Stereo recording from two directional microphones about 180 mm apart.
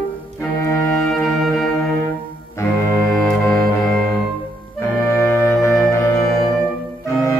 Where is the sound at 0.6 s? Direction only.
15° left (ahead or behind).